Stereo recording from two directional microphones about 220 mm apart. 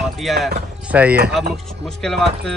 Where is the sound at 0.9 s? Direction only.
5° right (ahead or behind).